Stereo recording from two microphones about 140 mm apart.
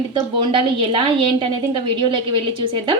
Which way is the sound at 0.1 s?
35° right (ahead or behind).